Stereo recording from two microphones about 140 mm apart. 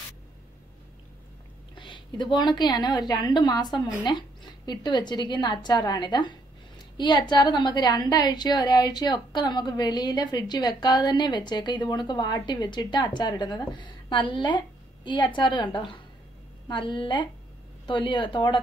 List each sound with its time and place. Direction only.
1.8 s a woman's voice: 35° left (ahead or behind)